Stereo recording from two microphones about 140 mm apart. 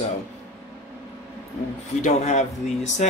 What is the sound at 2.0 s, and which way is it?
Speech, 55° left (ahead or behind).